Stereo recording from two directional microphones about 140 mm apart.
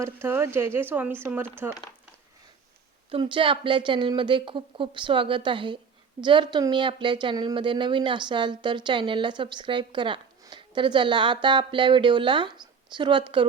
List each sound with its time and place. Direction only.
0.0 s speech: 15° right (ahead or behind)
3.1 s a woman's voice: 35° right (ahead or behind)